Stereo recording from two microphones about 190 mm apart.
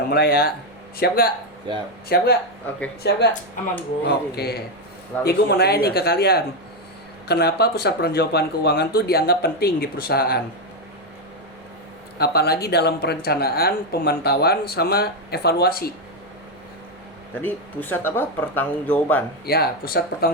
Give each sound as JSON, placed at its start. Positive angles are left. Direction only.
{"t": 0.1, "sound": "speech", "side_deg": 55}
{"t": 1.7, "sound": "speech", "side_deg": -25}
{"t": 2.0, "sound": "speech", "side_deg": 55}
{"t": 12.2, "sound": "speech", "side_deg": 55}
{"t": 17.4, "sound": "speech", "side_deg": 10}
{"t": 19.5, "sound": "speech", "side_deg": 55}